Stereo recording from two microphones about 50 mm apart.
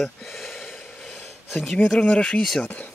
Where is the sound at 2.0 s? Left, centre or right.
Centre.